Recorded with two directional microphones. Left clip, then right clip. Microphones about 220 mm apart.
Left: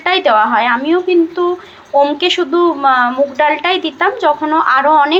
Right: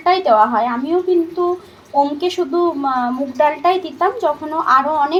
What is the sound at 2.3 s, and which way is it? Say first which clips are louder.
Speech: left 5 dB; 25° left (ahead or behind).